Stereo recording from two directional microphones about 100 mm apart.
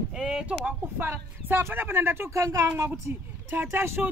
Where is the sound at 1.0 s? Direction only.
20° right (ahead or behind).